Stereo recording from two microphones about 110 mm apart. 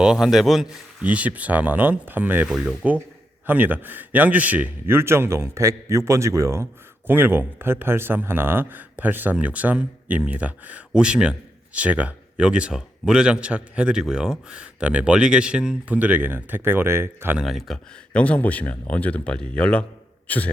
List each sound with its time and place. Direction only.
0.0 s a man's voice: 5° right (ahead or behind)
1.0 s a man's voice: 15° right (ahead or behind)
17.3 s a man's voice: 5° right (ahead or behind)
18.1 s a man's voice: 10° left (ahead or behind)